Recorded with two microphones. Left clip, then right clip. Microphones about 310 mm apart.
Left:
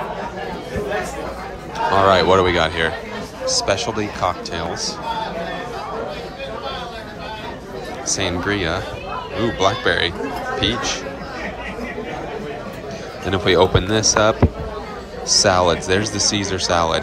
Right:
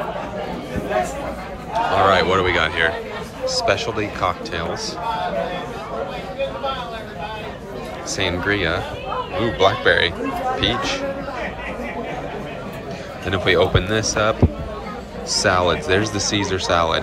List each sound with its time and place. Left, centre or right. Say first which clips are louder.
2.0 s speech: left 3 dB; centre
8.1 s speech: even; centre
13.3 s speech: left 2 dB; centre